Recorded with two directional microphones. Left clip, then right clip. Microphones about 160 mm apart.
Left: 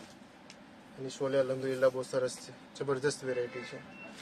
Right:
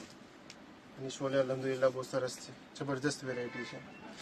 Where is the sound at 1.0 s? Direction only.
55° left (ahead or behind).